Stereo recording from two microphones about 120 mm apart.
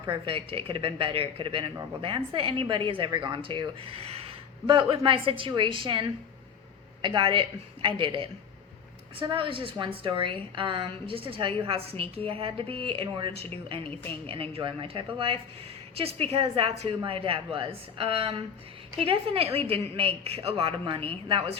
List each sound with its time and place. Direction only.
0.1 s a woman's voice: 50° right (ahead or behind)
3.9 s a woman's voice: 55° right (ahead or behind)